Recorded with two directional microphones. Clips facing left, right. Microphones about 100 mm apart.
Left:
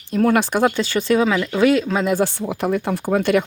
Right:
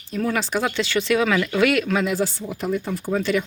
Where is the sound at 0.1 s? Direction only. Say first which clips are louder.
Left 6 dB; 55° left (ahead or behind).